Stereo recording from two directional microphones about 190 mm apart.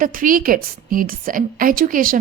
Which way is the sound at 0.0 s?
45° right (ahead or behind).